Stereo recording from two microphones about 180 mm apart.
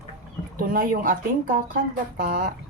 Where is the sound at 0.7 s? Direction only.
50° right (ahead or behind).